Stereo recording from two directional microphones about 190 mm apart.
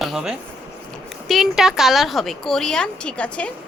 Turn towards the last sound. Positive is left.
turn(degrees=5)  # may be behind; listen again after turning